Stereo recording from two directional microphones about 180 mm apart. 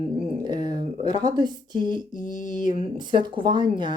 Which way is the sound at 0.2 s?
30° right (ahead or behind).